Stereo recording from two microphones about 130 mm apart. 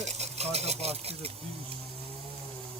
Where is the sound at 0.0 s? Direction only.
60° right (ahead or behind).